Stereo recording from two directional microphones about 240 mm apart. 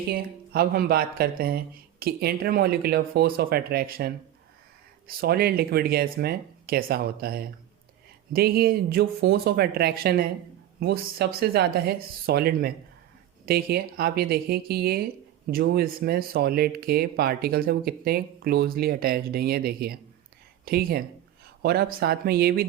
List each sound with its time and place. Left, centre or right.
0.1 s speech: right